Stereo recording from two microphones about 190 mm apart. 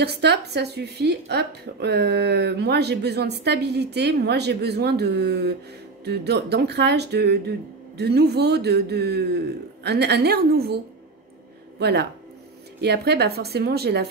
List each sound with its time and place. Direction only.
0.0 s a woman's voice: 60° right (ahead or behind)
11.8 s a woman's voice: 60° right (ahead or behind)